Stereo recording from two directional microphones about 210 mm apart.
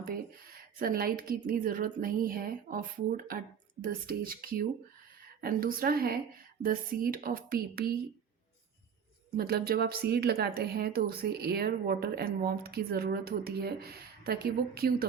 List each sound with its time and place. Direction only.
0.0 s a woman's voice: 45° right (ahead or behind)
9.3 s a woman's voice: 45° right (ahead or behind)